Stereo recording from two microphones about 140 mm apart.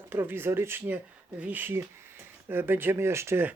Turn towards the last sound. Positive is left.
turn(degrees=-20)  # may be behind; listen again after turning